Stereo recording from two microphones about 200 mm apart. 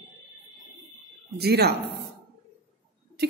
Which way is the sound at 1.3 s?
55° right (ahead or behind).